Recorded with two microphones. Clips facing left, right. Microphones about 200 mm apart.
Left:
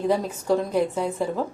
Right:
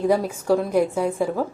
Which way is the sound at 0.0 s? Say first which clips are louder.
Right 3 dB; 10° right (ahead or behind).